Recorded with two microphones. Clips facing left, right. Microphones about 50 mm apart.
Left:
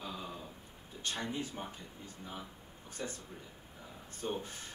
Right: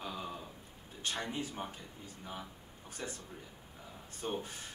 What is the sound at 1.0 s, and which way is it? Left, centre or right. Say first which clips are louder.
Speech: even; right.